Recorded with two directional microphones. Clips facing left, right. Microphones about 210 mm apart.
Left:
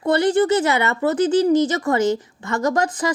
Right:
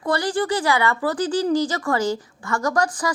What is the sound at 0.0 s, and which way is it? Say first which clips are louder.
A woman's voice: left 6 dB; 25° left (ahead or behind).